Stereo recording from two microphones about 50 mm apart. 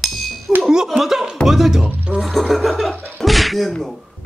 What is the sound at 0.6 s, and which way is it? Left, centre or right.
Speech, centre.